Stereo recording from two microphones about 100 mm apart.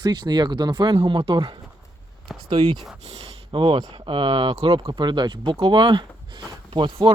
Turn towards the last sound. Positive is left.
turn(degrees=-50)  # may be behind; listen again after turning